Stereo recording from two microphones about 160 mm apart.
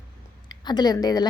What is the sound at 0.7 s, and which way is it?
Speech, 25° left (ahead or behind).